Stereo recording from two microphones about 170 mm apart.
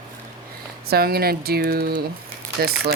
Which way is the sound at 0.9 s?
65° right (ahead or behind).